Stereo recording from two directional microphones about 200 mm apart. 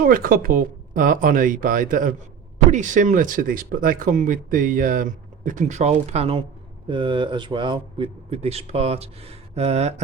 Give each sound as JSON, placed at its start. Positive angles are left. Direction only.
{"t": 0.0, "sound": "speech", "side_deg": -45}